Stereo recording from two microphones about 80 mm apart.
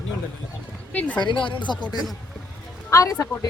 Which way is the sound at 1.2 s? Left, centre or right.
Left.